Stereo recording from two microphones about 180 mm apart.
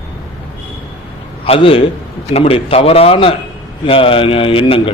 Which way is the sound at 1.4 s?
30° left (ahead or behind).